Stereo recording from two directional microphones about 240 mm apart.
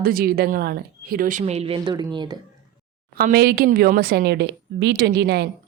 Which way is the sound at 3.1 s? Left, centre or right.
Right.